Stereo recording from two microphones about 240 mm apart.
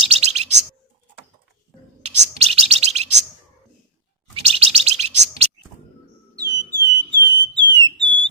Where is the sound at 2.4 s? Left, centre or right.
Right.